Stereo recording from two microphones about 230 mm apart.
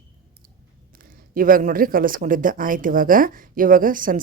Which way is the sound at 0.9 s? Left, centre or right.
Right.